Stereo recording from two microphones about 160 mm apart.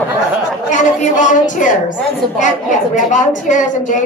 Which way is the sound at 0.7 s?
50° left (ahead or behind).